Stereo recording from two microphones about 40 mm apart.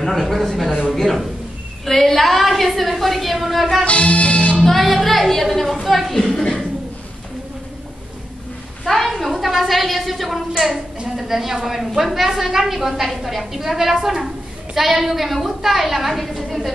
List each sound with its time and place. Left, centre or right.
0.0 s a woman's voice: centre
3.8 s music: left
4.6 s a woman's voice: centre
6.2 s a woman's voice: centre
8.8 s a sound: centre
9.1 s a woman's voice: centre